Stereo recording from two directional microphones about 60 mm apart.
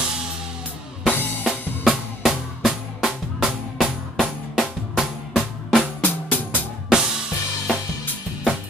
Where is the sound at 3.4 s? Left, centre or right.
Centre.